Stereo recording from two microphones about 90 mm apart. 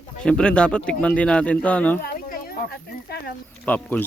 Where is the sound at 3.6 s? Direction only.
20° left (ahead or behind).